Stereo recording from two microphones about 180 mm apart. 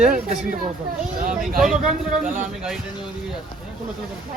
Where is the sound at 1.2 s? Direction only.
50° right (ahead or behind).